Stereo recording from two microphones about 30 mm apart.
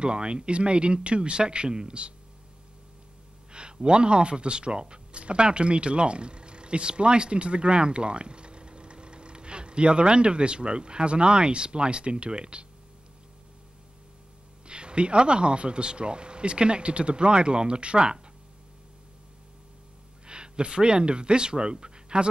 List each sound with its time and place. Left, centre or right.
0.0 s speech: right
3.5 s speech: right
14.7 s speech: right
20.2 s speech: right